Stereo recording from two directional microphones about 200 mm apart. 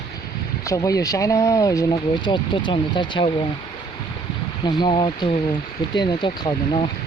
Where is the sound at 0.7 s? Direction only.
15° left (ahead or behind).